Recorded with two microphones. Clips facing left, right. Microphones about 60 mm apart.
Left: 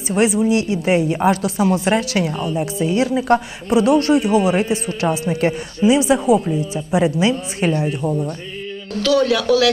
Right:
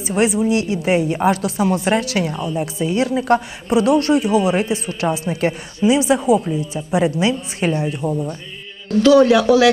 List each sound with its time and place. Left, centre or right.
0.0 s a woman's voice: centre
9.0 s a man's voice: right